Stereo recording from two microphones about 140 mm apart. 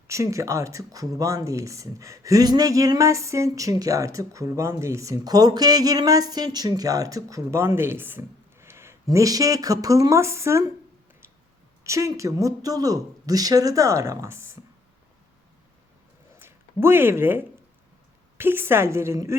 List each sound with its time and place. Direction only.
0.1 s speech: 20° right (ahead or behind)
11.8 s speech: 20° right (ahead or behind)
16.4 s speech: 15° right (ahead or behind)